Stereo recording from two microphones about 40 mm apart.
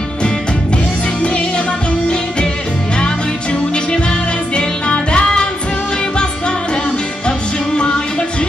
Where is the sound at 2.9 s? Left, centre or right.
Left.